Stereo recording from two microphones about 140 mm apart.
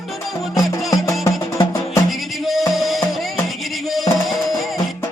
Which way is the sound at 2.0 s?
Centre (ahead or behind).